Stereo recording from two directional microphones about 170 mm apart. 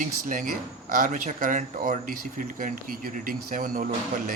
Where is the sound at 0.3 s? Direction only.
50° right (ahead or behind).